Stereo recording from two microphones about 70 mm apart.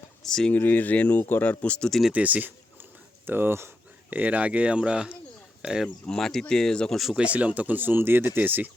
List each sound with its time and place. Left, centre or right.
0.2 s speech: centre
0.5 s speech: left
1.9 s speech: centre
2.1 s speech: right
4.1 s speech: right
6.1 s speech: centre
7.2 s speech: centre